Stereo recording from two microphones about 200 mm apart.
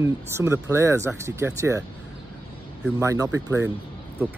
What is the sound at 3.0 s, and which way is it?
Speech, 15° right (ahead or behind).